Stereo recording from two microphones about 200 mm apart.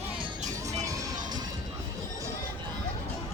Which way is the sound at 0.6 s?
15° right (ahead or behind).